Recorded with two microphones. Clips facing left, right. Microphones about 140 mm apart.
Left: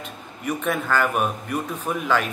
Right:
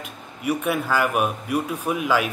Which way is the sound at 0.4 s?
10° right (ahead or behind).